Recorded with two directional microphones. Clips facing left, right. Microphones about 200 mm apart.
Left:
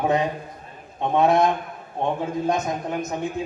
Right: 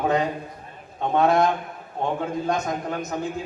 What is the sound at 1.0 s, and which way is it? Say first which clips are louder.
A man's voice: left 1 dB; 20° left (ahead or behind).